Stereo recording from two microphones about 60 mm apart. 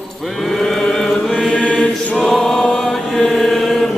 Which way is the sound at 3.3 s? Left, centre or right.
Centre.